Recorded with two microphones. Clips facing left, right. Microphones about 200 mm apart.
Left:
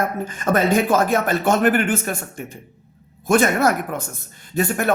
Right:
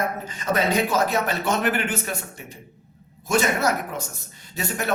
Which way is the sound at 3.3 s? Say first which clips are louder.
Left 5 dB; 55° left (ahead or behind).